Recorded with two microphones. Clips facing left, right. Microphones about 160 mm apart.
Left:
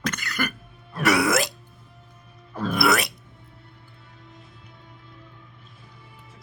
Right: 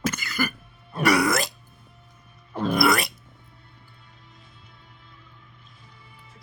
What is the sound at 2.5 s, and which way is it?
Music, 15° right (ahead or behind).